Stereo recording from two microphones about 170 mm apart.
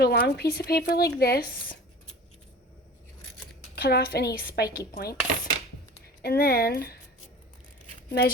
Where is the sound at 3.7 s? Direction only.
70° left (ahead or behind).